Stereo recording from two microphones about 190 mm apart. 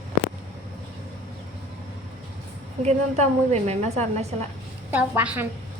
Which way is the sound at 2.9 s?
35° right (ahead or behind).